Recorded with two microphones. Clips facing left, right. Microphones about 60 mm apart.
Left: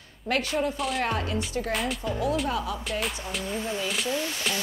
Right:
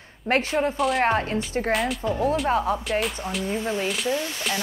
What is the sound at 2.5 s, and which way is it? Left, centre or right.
A woman's voice, right.